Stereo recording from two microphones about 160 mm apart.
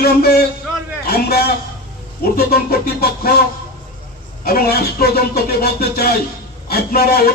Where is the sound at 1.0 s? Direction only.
80° left.